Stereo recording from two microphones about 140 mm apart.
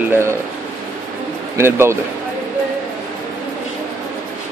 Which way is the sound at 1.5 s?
20° right (ahead or behind).